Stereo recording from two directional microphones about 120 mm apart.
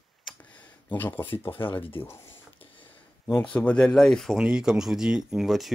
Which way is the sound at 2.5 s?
50° left (ahead or behind).